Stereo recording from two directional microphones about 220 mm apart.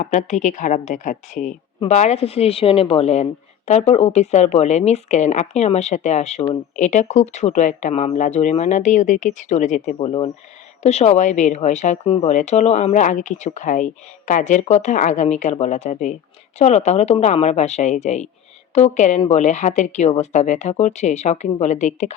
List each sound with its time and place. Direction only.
0.0 s speech: 35° left (ahead or behind)